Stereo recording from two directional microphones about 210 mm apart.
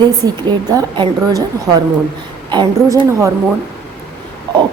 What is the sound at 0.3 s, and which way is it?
A woman's voice, 20° right (ahead or behind).